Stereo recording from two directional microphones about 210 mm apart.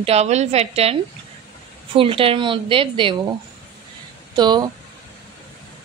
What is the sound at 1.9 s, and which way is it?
A woman's voice, 25° right (ahead or behind).